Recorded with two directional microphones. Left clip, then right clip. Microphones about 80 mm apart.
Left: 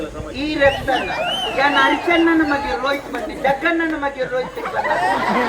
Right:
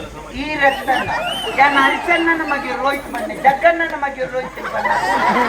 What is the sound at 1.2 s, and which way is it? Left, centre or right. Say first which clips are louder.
Speech: right 3 dB; centre.